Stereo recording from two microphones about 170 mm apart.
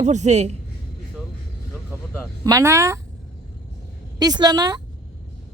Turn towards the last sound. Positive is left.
turn(degrees=-20)  # may be behind; listen again after turning